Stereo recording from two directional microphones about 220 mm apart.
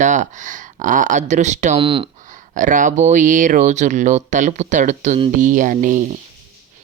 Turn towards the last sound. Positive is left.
turn(degrees=-35)  # may be behind; listen again after turning